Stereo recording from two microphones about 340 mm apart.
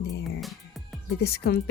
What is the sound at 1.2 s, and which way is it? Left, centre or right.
Speech, left.